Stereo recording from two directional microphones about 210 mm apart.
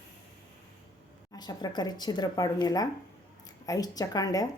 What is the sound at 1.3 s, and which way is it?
A woman's voice, 20° left (ahead or behind).